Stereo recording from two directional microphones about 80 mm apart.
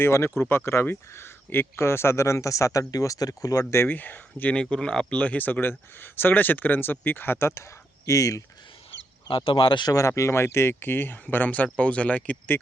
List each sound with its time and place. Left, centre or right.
0.0 s speech: left
3.8 s speech: left
4.5 s speech: centre; by 8.4 s left
9.3 s speech: left
9.9 s speech: left; by 12.5 s centre